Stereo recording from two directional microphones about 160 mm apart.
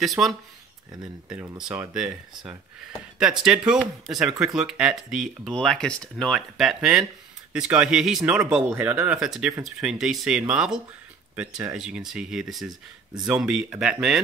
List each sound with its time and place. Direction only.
0.0 s speech: centre (ahead or behind)
1.3 s speech: 15° right (ahead or behind)
1.6 s speech: 5° right (ahead or behind)